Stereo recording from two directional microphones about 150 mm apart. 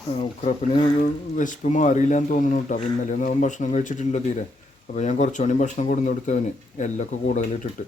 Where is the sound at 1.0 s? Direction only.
60° left (ahead or behind).